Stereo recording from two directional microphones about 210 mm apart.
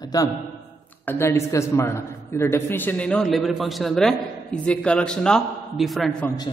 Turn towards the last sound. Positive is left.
turn(degrees=5)  # may be behind; listen again after turning